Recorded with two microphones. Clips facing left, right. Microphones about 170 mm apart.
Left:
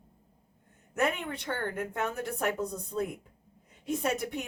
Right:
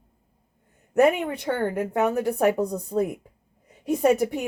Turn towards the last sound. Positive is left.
turn(degrees=-60)  # may be behind; listen again after turning